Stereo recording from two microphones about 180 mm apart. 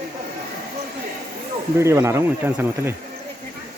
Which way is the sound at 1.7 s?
15° right (ahead or behind).